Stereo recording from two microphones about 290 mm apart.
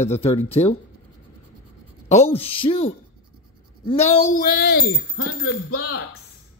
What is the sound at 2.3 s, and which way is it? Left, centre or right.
Speech, centre.